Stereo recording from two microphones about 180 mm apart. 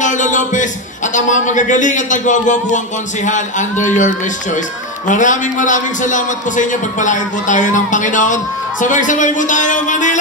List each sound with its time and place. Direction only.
0.0 s a man's voice: 45° left (ahead or behind)